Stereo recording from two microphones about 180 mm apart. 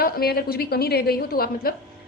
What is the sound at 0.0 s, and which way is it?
A woman's voice, 60° left (ahead or behind).